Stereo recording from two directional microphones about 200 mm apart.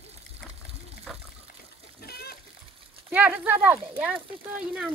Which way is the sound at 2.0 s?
50° left (ahead or behind).